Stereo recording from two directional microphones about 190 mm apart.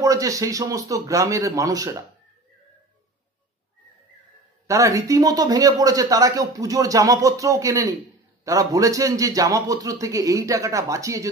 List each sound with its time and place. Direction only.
0.0 s speech: 15° right (ahead or behind)
4.6 s speech: 15° right (ahead or behind)